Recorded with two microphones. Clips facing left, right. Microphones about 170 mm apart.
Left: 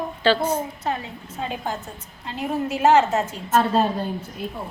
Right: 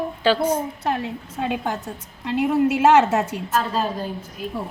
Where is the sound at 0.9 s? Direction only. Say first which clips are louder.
Right 3 dB; 70° right (ahead or behind).